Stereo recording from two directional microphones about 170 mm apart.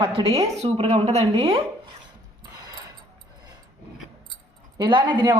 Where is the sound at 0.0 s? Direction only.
30° right (ahead or behind).